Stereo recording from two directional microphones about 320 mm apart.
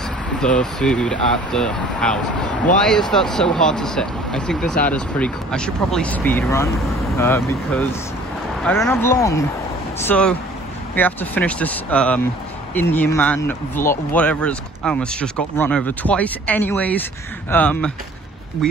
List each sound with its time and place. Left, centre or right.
0.4 s speech: centre